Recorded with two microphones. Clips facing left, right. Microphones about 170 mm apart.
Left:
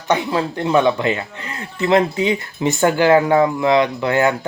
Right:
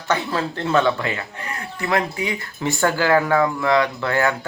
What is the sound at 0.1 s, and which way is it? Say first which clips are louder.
Speech: left 4 dB; 15° left (ahead or behind).